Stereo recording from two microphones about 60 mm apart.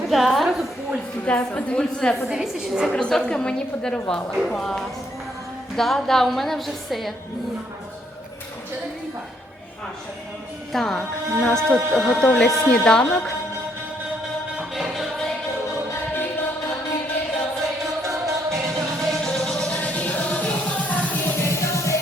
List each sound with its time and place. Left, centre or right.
0.1 s a woman's voice: centre
1.2 s a woman's voice: left
2.3 s a woman's voice: centre
2.9 s a woman's voice: centre
10.7 s a woman's voice: centre
14.8 s music: centre
18.0 s music: right
19.1 s music: centre
19.7 s music: left
21.3 s music: left